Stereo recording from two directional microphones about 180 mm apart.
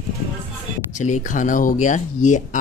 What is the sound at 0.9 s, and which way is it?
Speech, 40° left (ahead or behind).